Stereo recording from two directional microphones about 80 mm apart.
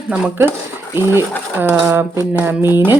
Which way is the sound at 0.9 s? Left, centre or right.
Right.